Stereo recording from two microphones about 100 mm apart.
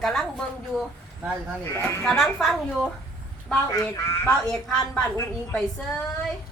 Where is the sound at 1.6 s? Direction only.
20° left (ahead or behind).